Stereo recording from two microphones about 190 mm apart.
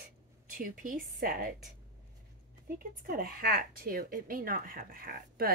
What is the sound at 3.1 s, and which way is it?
Speech, 50° right (ahead or behind).